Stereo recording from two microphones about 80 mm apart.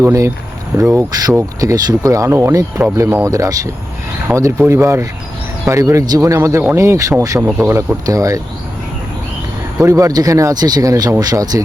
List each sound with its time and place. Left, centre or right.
0.0 s speech: right
1.3 s speech: right
1.7 s speech: right
8.0 s speech: right
9.8 s speech: right